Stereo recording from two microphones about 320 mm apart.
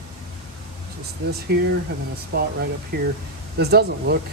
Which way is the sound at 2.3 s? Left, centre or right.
Right.